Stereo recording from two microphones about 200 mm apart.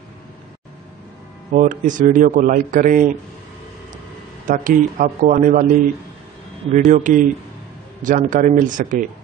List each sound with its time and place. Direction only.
1.5 s a man's voice: 40° right (ahead or behind)
4.5 s a man's voice: 45° right (ahead or behind)
6.7 s a man's voice: 40° right (ahead or behind)